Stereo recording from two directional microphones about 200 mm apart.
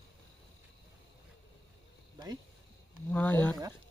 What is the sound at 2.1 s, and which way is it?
Insect, 20° right (ahead or behind).